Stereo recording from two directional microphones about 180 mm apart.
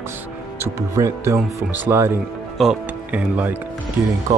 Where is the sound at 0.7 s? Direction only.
20° right (ahead or behind).